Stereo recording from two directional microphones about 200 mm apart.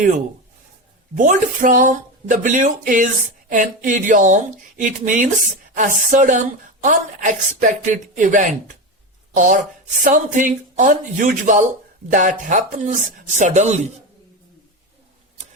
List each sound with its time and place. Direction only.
0.0 s a woman's voice: 40° right (ahead or behind)